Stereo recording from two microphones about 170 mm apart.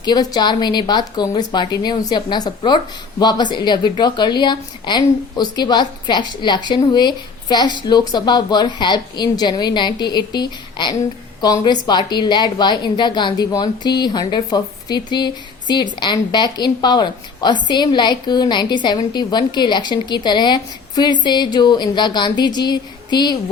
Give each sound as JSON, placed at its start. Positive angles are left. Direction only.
{"t": 0.0, "sound": "a woman's voice", "side_deg": 25}